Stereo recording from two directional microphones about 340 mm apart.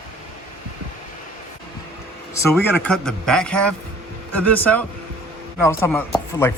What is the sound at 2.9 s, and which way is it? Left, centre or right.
A man's voice, centre.